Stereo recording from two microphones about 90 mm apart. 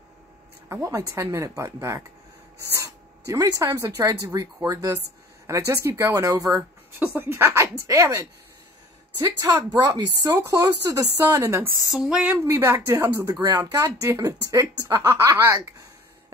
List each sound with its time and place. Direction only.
0.7 s speech: 30° right (ahead or behind)
7.0 s speech: 25° right (ahead or behind)
9.8 s speech: 45° right (ahead or behind)
11.9 s a sound: 5° right (ahead or behind)
12.4 s speech: 30° right (ahead or behind)